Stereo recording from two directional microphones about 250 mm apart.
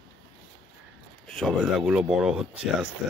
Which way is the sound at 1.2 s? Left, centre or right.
Centre.